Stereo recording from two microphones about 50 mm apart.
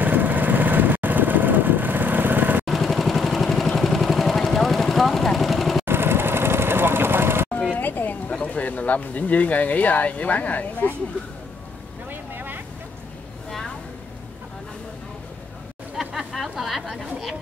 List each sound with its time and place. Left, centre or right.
0.0 s vehicle: right
2.6 s vehicle: centre
5.9 s vehicle: right
7.8 s a sound: left
8.3 s speech: left
12.1 s vehicle: right
16.0 s hubbub: centre
16.5 s chatter: centre